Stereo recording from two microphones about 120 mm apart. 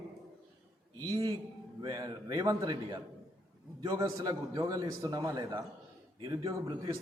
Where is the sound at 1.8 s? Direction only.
30° right (ahead or behind).